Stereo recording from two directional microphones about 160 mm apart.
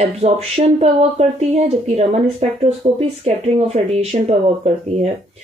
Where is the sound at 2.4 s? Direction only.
45° right (ahead or behind).